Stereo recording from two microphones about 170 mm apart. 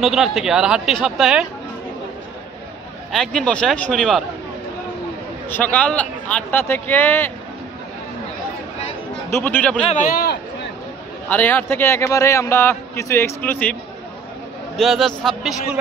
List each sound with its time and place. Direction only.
0.0 s speech: centre (ahead or behind)
3.1 s speech: 5° left (ahead or behind)
5.5 s a man's voice: 10° left (ahead or behind)
9.3 s a man's voice: 10° left (ahead or behind)
10.1 s speech: 70° left (ahead or behind)
11.2 s a man's voice: 10° left (ahead or behind)
14.8 s speech: centre (ahead or behind)